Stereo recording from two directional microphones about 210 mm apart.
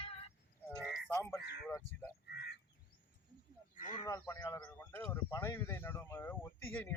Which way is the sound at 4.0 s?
15° left (ahead or behind).